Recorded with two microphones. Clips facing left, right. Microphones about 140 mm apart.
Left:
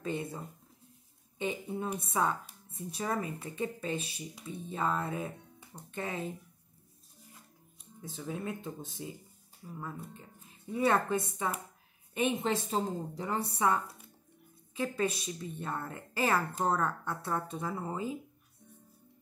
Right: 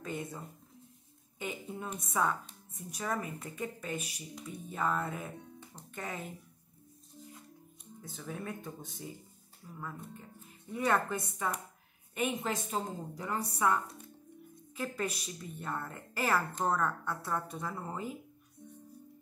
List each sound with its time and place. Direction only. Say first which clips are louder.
0.0 s speech: left 4 dB; 25° left (ahead or behind)
2.0 s a woman's voice: right 1 dB; 25° left (ahead or behind)
8.2 s a woman's voice: left 3 dB; 20° left (ahead or behind)
13.8 s music: right 3 dB; 10° left (ahead or behind)
14.8 s a woman's voice: left 4 dB; 25° left (ahead or behind)